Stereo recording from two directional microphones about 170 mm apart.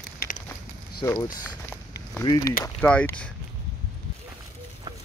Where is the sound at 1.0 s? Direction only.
25° left (ahead or behind).